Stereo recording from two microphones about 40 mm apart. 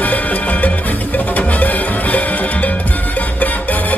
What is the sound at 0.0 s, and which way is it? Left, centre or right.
Music, left.